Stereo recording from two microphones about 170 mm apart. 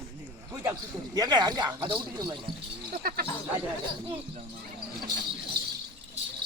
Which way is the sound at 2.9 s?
60° right (ahead or behind).